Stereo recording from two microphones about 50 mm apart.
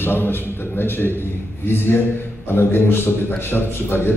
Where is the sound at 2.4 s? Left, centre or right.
Left.